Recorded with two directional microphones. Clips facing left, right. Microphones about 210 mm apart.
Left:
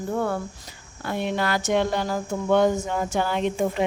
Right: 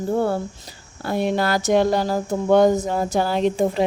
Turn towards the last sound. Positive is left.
turn(degrees=-35)  # may be behind; listen again after turning